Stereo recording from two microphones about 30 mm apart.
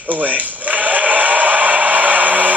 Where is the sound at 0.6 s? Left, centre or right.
Right.